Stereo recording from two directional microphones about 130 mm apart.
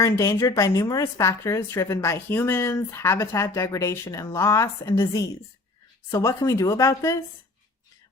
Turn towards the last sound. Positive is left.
turn(degrees=25)  # may be behind; listen again after turning